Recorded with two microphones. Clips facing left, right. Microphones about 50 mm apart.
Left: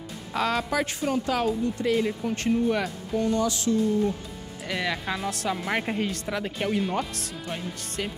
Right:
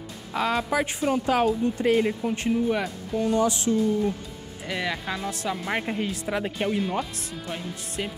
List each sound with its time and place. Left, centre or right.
0.3 s a woman's voice: centre; by 2.1 s right
2.2 s speech: centre
3.3 s a woman's voice: right
4.6 s speech: centre